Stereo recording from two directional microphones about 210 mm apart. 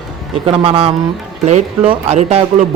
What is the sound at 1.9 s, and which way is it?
Speech, 30° right (ahead or behind).